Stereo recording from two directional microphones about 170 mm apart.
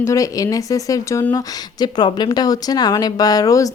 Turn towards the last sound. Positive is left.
turn(degrees=20)  # may be behind; listen again after turning